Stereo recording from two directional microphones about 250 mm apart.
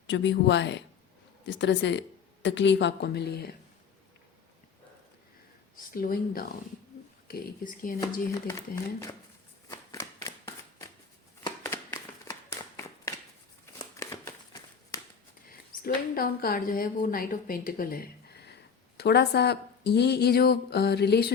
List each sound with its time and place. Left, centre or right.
0.1 s speech: left
5.9 s a woman's voice: left
8.3 s speech: centre
9.6 s shuffling cards: centre
11.4 s a sound: centre
15.8 s a woman's voice: left